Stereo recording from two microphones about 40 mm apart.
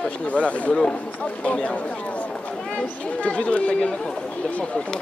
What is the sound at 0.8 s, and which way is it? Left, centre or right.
Speech, left.